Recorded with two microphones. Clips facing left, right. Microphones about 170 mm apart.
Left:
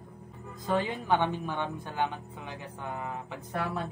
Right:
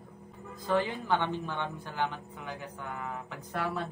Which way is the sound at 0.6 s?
15° left (ahead or behind).